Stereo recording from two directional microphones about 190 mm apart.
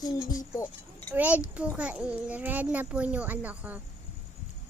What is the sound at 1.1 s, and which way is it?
A child's voice, 10° right (ahead or behind).